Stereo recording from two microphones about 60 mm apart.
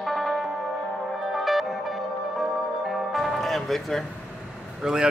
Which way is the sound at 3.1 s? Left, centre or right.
Centre.